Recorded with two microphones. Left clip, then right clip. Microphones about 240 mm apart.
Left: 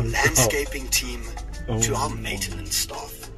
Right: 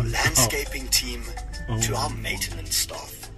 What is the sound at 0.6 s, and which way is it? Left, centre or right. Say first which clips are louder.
Speech: even; right.